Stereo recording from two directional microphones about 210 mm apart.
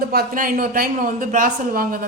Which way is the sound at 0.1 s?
45° right (ahead or behind).